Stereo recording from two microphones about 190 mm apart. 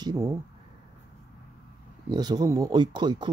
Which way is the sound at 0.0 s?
15° right (ahead or behind).